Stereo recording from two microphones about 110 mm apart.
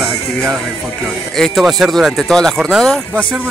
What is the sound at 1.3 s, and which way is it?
A man's voice, centre (ahead or behind).